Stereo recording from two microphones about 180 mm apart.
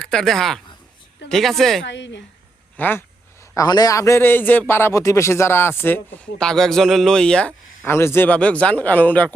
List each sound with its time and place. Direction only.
0.0 s speech: 5° left (ahead or behind)
1.8 s a woman's voice: 80° left
2.7 s speech: 10° left (ahead or behind)
3.5 s a man's voice: 20° left (ahead or behind)